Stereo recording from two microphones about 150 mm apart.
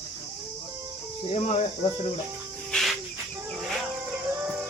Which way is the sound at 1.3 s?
45° left (ahead or behind).